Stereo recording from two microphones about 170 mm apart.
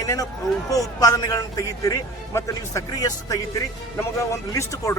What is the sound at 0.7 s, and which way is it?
A man's voice, 20° left (ahead or behind).